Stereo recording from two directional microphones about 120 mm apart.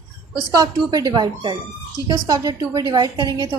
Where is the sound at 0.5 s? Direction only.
30° right (ahead or behind).